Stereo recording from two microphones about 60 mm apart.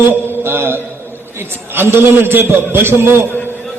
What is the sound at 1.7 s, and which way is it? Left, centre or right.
A man's voice, right.